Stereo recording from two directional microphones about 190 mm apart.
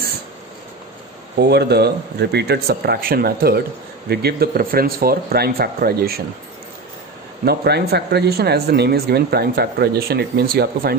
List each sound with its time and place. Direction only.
1.4 s speech: 60° right (ahead or behind)
7.4 s speech: 60° right (ahead or behind)